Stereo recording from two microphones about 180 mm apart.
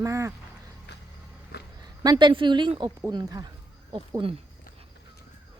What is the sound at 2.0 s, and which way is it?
A woman's voice, 25° right (ahead or behind).